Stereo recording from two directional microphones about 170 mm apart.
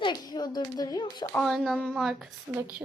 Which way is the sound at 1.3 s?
Centre (ahead or behind).